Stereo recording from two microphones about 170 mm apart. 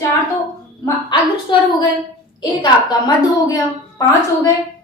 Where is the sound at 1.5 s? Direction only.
30° left (ahead or behind).